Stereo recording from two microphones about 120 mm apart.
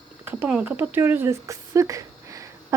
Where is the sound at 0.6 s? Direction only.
15° right (ahead or behind).